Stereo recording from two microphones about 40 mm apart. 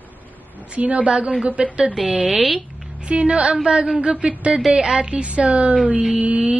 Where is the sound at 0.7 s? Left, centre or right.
Right.